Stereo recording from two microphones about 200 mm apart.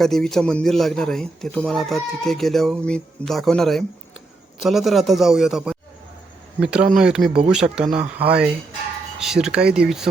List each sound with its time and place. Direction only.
0.0 s a man's voice: centre (ahead or behind)
9.2 s a man's voice: centre (ahead or behind)